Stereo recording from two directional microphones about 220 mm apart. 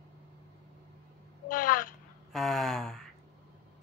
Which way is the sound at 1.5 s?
35° left (ahead or behind).